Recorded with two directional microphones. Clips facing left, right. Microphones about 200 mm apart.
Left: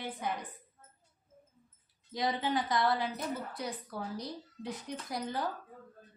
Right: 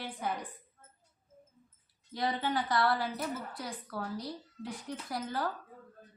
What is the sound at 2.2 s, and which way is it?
A woman's voice, 20° left (ahead or behind).